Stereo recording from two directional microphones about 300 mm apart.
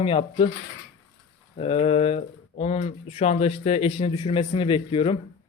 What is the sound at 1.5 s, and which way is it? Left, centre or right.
A man's voice, centre.